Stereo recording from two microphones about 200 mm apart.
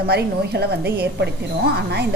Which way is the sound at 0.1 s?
55° right (ahead or behind).